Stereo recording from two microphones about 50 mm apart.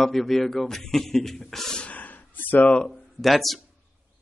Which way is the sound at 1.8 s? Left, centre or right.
Left.